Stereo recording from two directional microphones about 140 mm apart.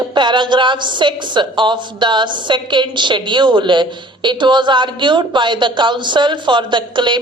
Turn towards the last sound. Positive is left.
turn(degrees=-35)  # may be behind; listen again after turning